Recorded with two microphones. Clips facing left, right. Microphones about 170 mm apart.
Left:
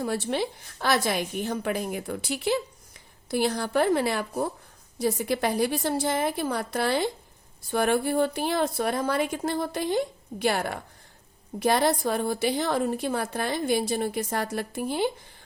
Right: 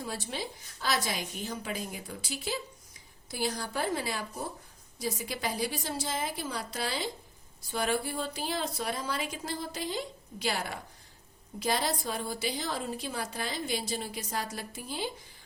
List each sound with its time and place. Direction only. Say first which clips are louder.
0.0 s a woman's voice: left 10 dB; 65° left (ahead or behind)